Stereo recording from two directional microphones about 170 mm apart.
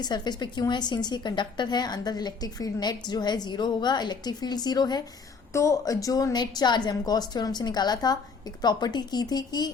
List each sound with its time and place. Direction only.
0.0 s a woman's voice: 25° left (ahead or behind)